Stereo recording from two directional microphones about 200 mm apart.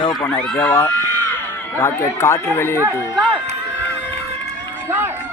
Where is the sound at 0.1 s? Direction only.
5° left (ahead or behind).